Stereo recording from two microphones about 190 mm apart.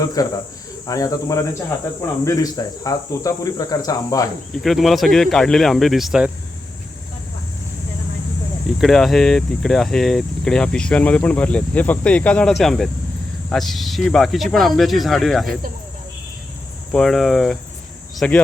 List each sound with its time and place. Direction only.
0.0 s speech: 20° left (ahead or behind)
4.5 s speech: centre (ahead or behind)
8.8 s speech: centre (ahead or behind)
16.9 s speech: centre (ahead or behind)